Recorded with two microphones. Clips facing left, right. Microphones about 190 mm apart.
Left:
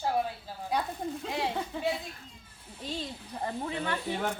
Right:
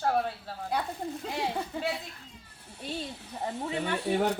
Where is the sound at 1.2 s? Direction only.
Centre (ahead or behind).